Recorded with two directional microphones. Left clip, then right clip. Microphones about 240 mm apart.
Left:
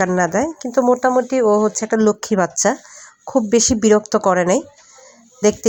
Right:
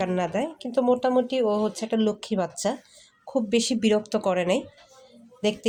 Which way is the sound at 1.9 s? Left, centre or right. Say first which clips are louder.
Left 10 dB; left.